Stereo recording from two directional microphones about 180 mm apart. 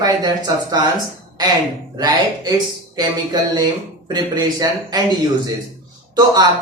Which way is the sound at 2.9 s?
25° right (ahead or behind).